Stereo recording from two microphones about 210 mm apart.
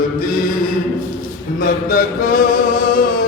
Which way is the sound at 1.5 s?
45° left (ahead or behind).